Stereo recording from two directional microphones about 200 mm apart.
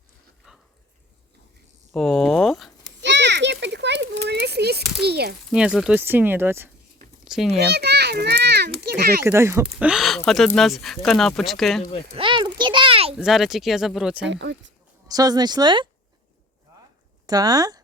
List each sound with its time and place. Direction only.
0.5 s a sound: 5° right (ahead or behind)
1.9 s a sound: centre (ahead or behind)
3.0 s children playing: 60° right (ahead or behind)
4.3 s a sound: 55° right (ahead or behind)
4.9 s speech: 55° right (ahead or behind)
5.5 s a child's voice: 5° right (ahead or behind)
7.6 s children playing: 55° right (ahead or behind)
9.2 s speech: 10° right (ahead or behind)
9.7 s speech: centre (ahead or behind)
12.1 s a sound: 25° right (ahead or behind)
13.1 s speech: centre (ahead or behind)
14.3 s speech: 65° right (ahead or behind)
15.0 s speech: 20° right (ahead or behind)
17.2 s speech: 20° right (ahead or behind)